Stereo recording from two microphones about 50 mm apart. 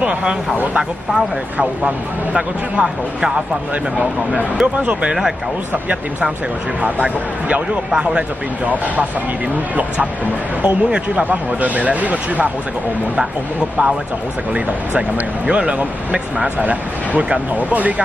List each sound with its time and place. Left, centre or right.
0.0 s speech: right
4.6 s speech: right
6.8 s speech: right
10.6 s speech: centre
11.2 s speech: right
14.5 s speech: right